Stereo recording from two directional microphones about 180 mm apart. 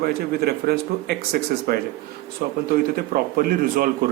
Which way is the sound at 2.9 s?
55° right (ahead or behind).